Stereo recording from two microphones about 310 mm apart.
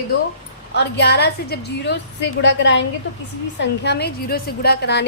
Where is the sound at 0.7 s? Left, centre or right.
Left.